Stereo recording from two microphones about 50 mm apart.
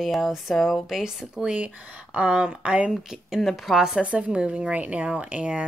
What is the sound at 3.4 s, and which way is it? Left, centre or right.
Speech, centre.